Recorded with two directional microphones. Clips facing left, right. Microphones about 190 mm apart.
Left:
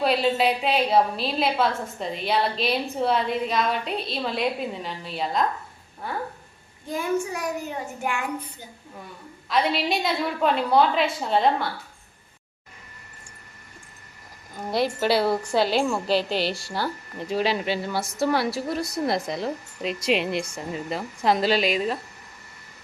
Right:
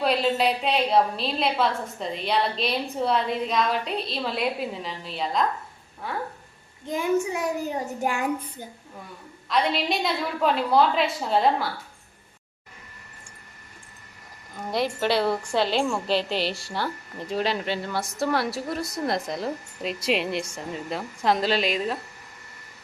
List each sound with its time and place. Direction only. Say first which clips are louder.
0.0 s a woman's voice: left 1 dB; centre (ahead or behind)
6.8 s a child's voice: right 2 dB; 20° right (ahead or behind)
7.6 s a child's voice: right 3 dB; 35° right (ahead or behind)
9.5 s a woman's voice: left 1 dB; centre (ahead or behind)
14.7 s a woman's voice: left 2 dB; centre (ahead or behind)